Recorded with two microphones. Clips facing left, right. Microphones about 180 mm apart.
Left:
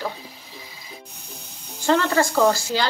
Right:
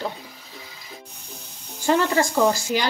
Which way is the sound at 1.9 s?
15° right (ahead or behind).